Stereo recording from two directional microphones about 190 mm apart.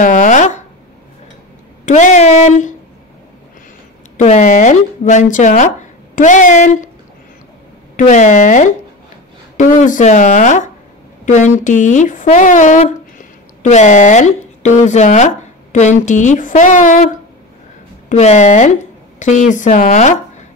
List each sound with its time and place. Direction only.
0.0 s a sound: 40° left (ahead or behind)
1.9 s speech: 40° left (ahead or behind)
4.2 s speech: 35° left (ahead or behind)
7.9 s speech: 40° left (ahead or behind)